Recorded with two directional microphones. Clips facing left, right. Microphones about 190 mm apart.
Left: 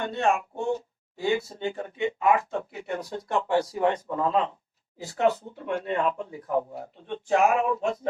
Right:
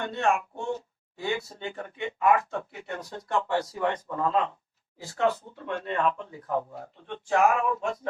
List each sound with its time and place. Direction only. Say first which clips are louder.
0.0 s a man's voice: left 1 dB; 20° left (ahead or behind)